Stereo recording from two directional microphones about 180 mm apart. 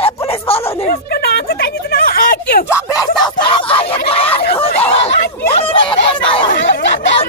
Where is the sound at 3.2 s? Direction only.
30° left (ahead or behind).